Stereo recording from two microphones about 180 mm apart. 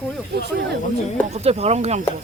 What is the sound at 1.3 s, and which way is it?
Speech, 35° right (ahead or behind).